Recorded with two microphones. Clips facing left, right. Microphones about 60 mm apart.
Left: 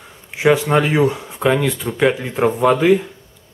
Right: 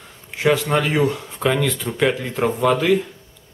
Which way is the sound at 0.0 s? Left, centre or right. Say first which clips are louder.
Left 3 dB; centre.